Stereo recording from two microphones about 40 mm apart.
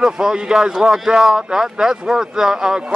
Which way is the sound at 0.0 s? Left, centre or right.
Centre.